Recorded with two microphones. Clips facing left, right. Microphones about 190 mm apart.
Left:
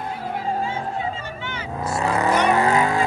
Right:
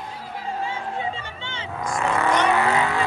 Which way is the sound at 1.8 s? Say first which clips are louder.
Left 1 dB; 35° left (ahead or behind).